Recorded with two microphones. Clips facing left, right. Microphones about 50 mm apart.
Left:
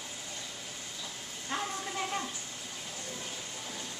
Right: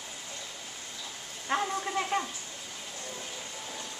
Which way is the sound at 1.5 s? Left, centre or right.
Right.